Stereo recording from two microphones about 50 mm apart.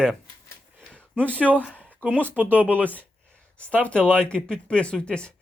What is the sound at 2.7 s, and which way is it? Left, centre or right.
Speech, left.